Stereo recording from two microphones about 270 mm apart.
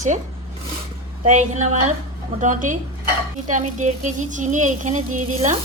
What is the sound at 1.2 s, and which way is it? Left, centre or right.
Speech, right.